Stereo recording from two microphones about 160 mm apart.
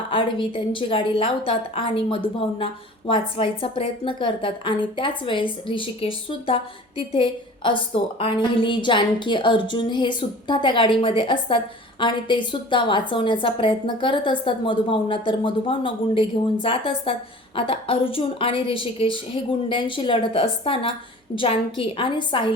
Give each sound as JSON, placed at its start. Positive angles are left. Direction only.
{"t": 0.1, "sound": "a woman's voice", "side_deg": 30}